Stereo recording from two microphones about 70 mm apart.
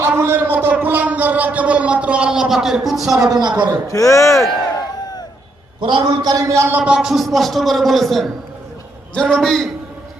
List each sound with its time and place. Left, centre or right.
0.0 s speech: right; by 3.2 s centre
3.2 s a man's voice: right
3.8 s a man's voice: left
5.8 s a man's voice: right
6.4 s a sound: right
6.7 s speech: right
6.9 s a man's voice: centre